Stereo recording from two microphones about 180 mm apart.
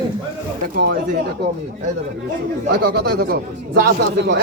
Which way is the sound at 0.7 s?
55° right (ahead or behind).